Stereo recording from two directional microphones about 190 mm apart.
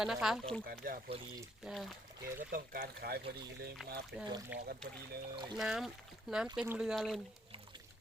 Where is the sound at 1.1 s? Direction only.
30° right (ahead or behind).